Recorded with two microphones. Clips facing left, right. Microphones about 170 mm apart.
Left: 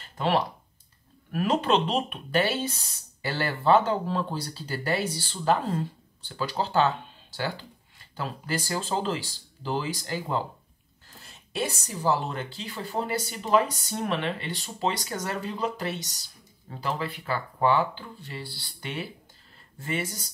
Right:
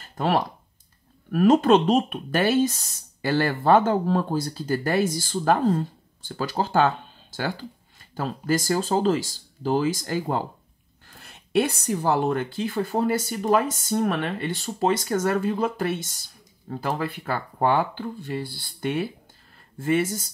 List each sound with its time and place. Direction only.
0.0 s a sound: 45° right (ahead or behind)
1.3 s speech: 45° right (ahead or behind)
11.1 s speech: 60° right (ahead or behind)